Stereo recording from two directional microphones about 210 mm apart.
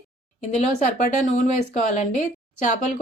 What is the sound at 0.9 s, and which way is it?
Speech, 35° left (ahead or behind).